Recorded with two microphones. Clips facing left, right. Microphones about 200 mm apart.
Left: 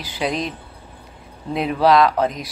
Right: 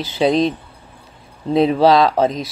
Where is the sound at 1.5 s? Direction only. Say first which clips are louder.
Right 4 dB; 30° right (ahead or behind).